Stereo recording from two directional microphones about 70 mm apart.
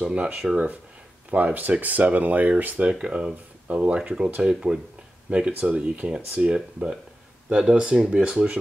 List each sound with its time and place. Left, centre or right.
0.0 s speech: centre